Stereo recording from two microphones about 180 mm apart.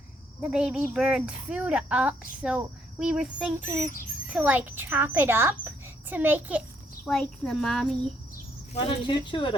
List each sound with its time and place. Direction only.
0.4 s a child's voice: 5° right (ahead or behind)
7.0 s speech: 5° left (ahead or behind)
8.7 s speech: 25° left (ahead or behind)